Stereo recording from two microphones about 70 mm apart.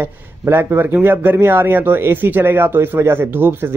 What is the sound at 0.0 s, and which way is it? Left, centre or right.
Speech, right.